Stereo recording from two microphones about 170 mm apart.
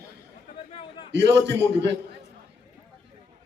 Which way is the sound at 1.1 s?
90° right.